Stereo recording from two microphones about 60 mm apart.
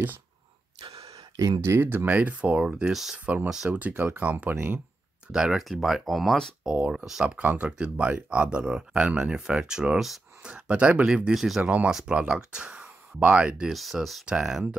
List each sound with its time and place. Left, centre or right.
1.0 s a sound: right
1.8 s speech: right
2.0 s speech: right
2.9 s speech: centre
3.7 s speech: right
5.3 s speech: centre
5.6 s speech: centre
6.6 s speech: centre
9.9 s speech: centre
10.4 s speech: centre
11.3 s speech: centre
11.6 s speech: right
13.7 s speech: centre
14.2 s speech: centre